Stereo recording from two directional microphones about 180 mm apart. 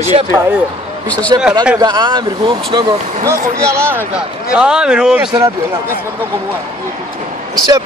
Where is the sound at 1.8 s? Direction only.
20° right (ahead or behind).